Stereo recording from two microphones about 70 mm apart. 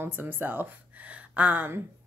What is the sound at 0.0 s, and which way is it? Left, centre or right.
A woman's voice, right.